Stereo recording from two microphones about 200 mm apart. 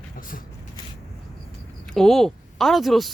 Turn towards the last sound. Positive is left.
turn(degrees=0)  # may be behind; listen again after turning